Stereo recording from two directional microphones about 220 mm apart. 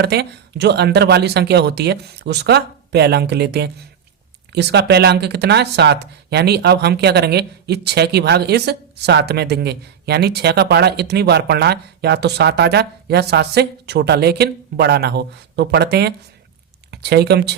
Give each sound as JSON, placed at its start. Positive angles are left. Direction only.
{"t": 0.0, "sound": "speech", "side_deg": -50}